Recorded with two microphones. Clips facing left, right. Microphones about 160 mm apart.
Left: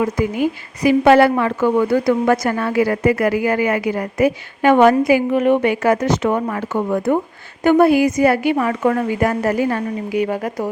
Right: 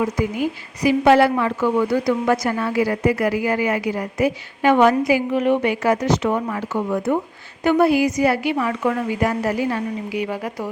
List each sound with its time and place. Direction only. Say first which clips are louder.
0.2 s a woman's voice: left 3 dB; 55° left (ahead or behind)